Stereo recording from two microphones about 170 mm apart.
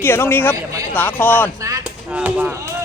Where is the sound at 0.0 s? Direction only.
15° left (ahead or behind).